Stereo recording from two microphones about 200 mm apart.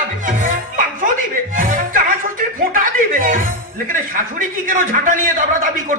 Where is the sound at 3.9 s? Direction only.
40° right (ahead or behind).